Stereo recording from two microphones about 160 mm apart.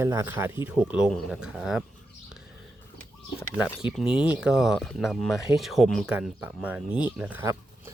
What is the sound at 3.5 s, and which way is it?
Speech, 5° right (ahead or behind).